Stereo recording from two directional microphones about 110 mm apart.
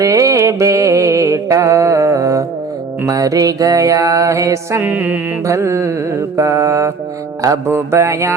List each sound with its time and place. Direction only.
0.0 s music: 30° right (ahead or behind)
4.8 s music: 15° right (ahead or behind)
5.5 s music: 25° right (ahead or behind)